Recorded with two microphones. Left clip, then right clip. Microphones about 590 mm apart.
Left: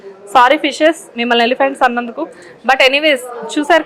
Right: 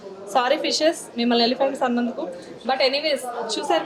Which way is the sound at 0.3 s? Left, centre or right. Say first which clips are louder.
Left 10 dB; left.